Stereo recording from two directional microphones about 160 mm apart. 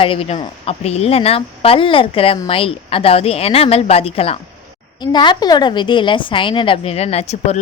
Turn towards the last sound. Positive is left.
turn(degrees=40)  # may be behind; listen again after turning